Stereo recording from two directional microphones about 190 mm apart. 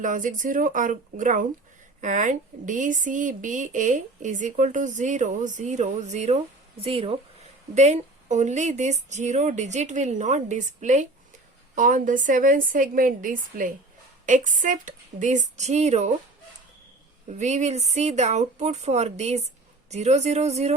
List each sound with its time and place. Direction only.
0.0 s a woman's voice: 45° right (ahead or behind)
17.2 s speech: 40° right (ahead or behind)